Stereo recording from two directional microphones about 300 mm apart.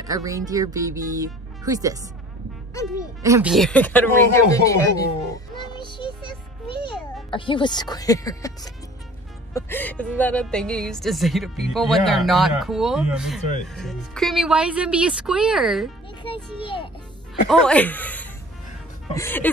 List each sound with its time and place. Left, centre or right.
0.0 s speech: centre
2.7 s speech: centre
3.2 s a woman's voice: centre
5.8 s child singing: centre
6.8 s a child's voice: centre
17.5 s a woman's voice: centre